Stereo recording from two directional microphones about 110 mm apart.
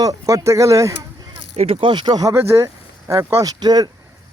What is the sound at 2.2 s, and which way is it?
Speech, 25° right (ahead or behind).